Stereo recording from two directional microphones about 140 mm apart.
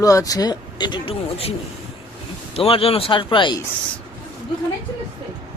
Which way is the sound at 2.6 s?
45° left (ahead or behind).